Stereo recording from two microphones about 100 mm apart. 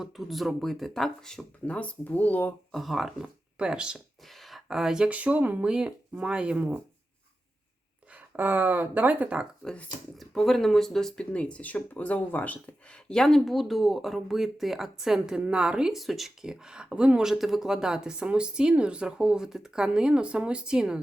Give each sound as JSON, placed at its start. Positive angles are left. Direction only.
{"t": 0.0, "sound": "speech", "side_deg": 0}
{"t": 2.7, "sound": "a woman's voice", "side_deg": 0}
{"t": 8.1, "sound": "a woman's voice", "side_deg": -20}
{"t": 9.6, "sound": "speech", "side_deg": 15}
{"t": 10.2, "sound": "a woman's voice", "side_deg": 0}